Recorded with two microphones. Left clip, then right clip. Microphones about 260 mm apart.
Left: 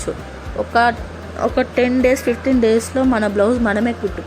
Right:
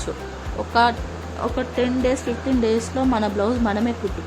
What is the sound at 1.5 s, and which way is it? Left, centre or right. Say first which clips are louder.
A woman's voice: left 6 dB; centre.